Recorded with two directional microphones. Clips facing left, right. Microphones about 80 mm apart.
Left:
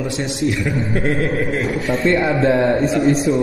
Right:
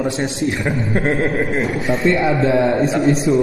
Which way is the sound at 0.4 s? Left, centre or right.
Right.